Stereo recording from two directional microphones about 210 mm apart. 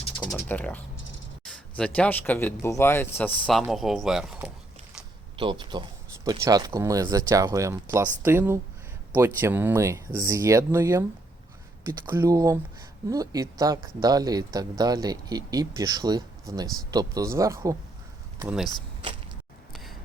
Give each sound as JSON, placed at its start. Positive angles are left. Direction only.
{"t": 0.0, "sound": "typing", "side_deg": 20}
{"t": 1.5, "sound": "speech", "side_deg": 5}
{"t": 5.4, "sound": "speech", "side_deg": -20}
{"t": 19.7, "sound": "a sound", "side_deg": 0}